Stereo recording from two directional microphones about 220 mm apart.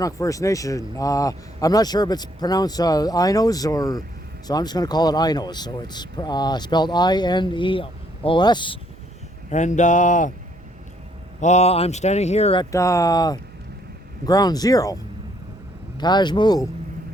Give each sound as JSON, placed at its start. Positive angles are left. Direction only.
{"t": 0.0, "sound": "speech", "side_deg": 15}
{"t": 9.5, "sound": "speech", "side_deg": 35}
{"t": 11.3, "sound": "speech", "side_deg": 30}
{"t": 12.7, "sound": "speech", "side_deg": 15}
{"t": 16.0, "sound": "speech", "side_deg": 20}